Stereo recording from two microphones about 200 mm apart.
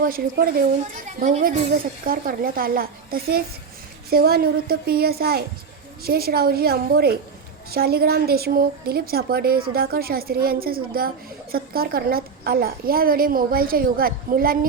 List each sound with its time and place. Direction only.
0.0 s a woman's voice: 50° right (ahead or behind)